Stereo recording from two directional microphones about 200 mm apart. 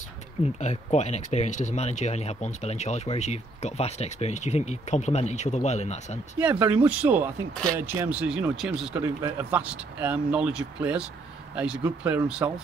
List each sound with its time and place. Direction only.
0.9 s speech: 35° left (ahead or behind)
6.4 s speech: 10° right (ahead or behind)